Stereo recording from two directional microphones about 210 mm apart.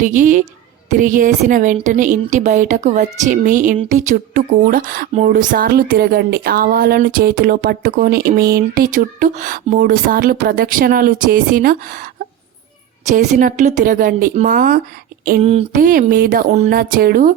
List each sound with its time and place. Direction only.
0.0 s speech: 35° right (ahead or behind)
13.1 s speech: 35° right (ahead or behind)
15.4 s speech: 30° right (ahead or behind)
15.8 s speech: 40° right (ahead or behind)